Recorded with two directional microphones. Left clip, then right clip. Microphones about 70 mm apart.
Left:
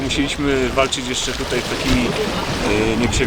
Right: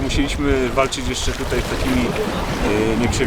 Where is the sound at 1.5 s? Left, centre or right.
Left.